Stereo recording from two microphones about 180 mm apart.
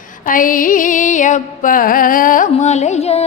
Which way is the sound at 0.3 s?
50° left (ahead or behind).